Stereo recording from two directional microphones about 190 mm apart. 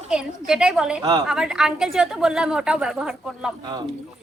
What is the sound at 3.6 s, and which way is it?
Speech, 20° right (ahead or behind).